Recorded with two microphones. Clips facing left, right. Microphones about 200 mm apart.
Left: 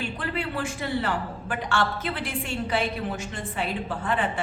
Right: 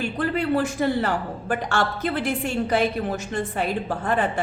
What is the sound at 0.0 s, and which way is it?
A woman's voice, 45° right (ahead or behind).